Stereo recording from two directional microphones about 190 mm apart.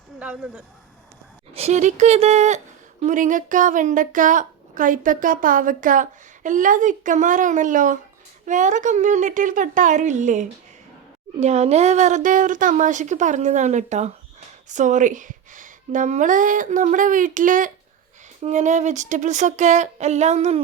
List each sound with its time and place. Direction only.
0.2 s speech: 5° right (ahead or behind)
1.5 s a woman's voice: 35° right (ahead or behind)